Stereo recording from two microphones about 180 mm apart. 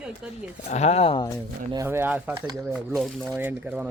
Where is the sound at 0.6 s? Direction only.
40° left (ahead or behind).